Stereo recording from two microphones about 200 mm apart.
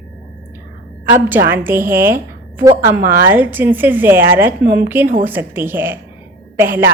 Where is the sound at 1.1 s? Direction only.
10° right (ahead or behind).